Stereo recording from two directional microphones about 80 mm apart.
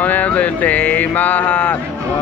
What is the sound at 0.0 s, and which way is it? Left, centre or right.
Speech, centre.